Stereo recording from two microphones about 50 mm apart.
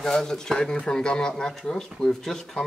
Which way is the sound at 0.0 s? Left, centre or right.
Centre.